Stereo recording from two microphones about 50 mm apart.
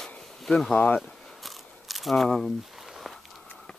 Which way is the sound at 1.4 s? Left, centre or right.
Centre.